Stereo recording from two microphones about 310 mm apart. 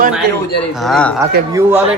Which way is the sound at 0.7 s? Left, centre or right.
Centre.